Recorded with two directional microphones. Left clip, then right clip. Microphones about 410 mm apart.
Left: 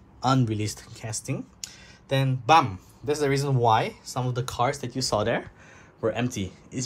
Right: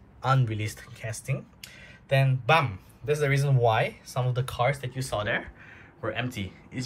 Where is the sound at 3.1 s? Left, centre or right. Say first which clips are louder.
Left 1 dB; left.